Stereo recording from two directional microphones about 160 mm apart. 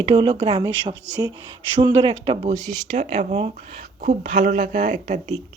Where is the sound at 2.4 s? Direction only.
45° right (ahead or behind).